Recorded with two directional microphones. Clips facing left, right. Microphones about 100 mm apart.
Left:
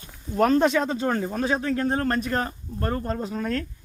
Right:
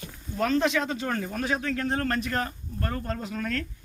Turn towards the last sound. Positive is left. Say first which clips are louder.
# left 4 dB
turn(degrees=30)  # may be behind; listen again after turning